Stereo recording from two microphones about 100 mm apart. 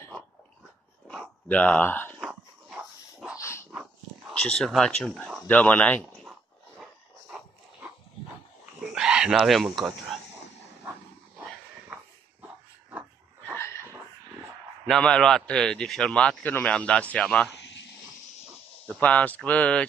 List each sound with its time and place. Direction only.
1.0 s dog: 5° left (ahead or behind)
2.1 s a sound: centre (ahead or behind)
3.3 s dog: 30° left (ahead or behind)
4.3 s a man's voice: 10° left (ahead or behind)
8.9 s speech: 5° right (ahead or behind)
14.9 s a man's voice: 5° left (ahead or behind)
18.9 s a man's voice: 15° left (ahead or behind)